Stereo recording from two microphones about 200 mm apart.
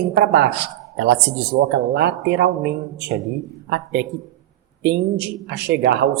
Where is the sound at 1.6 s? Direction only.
55° right (ahead or behind).